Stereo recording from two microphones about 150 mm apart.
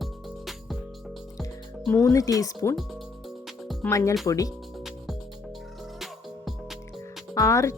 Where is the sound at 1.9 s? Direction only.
20° left (ahead or behind).